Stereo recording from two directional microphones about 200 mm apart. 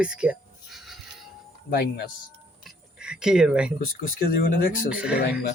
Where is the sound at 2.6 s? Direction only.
5° right (ahead or behind).